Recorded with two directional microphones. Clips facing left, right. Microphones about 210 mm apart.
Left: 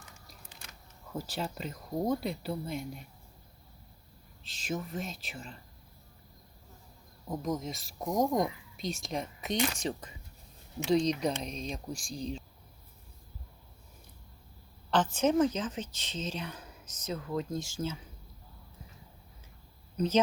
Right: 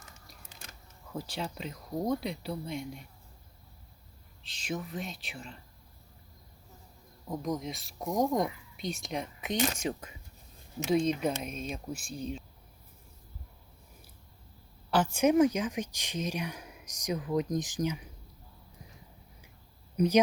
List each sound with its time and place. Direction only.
1.1 s speech: centre (ahead or behind)
4.4 s speech: centre (ahead or behind)
7.3 s speech: centre (ahead or behind)
10.8 s speech: 5° right (ahead or behind)
11.9 s speech: 35° left (ahead or behind)
14.8 s speech: 10° right (ahead or behind)
20.0 s speech: 10° right (ahead or behind)